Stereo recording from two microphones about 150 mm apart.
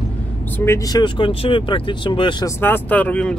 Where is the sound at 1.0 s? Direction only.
35° left (ahead or behind).